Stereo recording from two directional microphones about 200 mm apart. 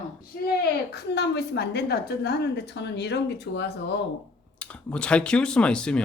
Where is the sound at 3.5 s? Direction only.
70° left (ahead or behind).